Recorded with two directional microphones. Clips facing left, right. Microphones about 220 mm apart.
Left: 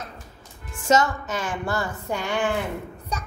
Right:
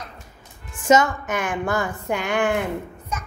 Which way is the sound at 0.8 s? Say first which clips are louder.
Right 3 dB; 15° right (ahead or behind).